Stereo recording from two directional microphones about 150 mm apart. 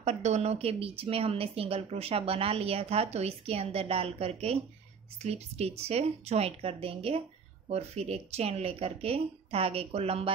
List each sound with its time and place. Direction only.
0.0 s speech: 50° right (ahead or behind)